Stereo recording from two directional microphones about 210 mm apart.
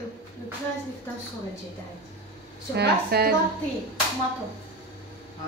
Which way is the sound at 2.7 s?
50° right (ahead or behind).